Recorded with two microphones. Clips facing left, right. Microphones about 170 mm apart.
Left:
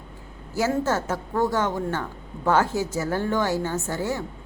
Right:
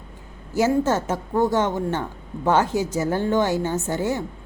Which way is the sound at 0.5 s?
20° right (ahead or behind).